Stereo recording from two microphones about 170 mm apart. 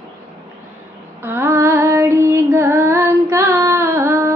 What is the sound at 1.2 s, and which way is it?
Female singing, 15° right (ahead or behind).